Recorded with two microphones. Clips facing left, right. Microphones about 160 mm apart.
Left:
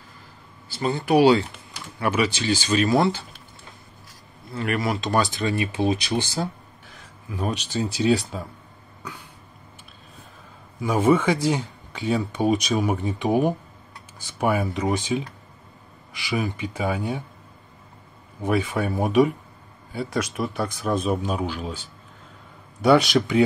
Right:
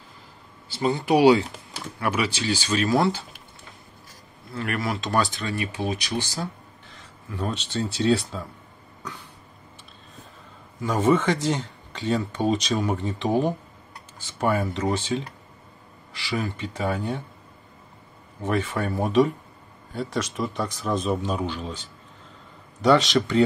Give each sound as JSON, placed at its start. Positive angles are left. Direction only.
{"t": 0.8, "sound": "speech", "side_deg": -15}
{"t": 2.0, "sound": "speech", "side_deg": 5}
{"t": 2.2, "sound": "speech", "side_deg": -5}
{"t": 4.6, "sound": "speech", "side_deg": 5}
{"t": 5.4, "sound": "speech", "side_deg": 20}
{"t": 6.9, "sound": "speech", "side_deg": 10}
{"t": 10.8, "sound": "speech", "side_deg": 10}
{"t": 18.4, "sound": "speech", "side_deg": 15}